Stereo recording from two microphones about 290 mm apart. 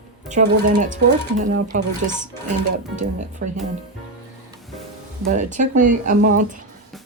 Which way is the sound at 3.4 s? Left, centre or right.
Right.